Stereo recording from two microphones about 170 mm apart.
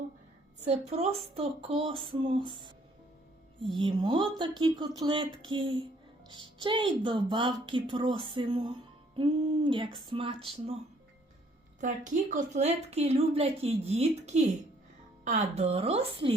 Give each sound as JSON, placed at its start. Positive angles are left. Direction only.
{"t": 0.6, "sound": "speech", "side_deg": -40}
{"t": 11.8, "sound": "speech", "side_deg": -45}